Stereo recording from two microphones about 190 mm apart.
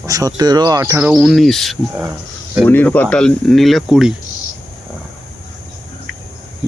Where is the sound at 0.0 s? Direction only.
20° right (ahead or behind).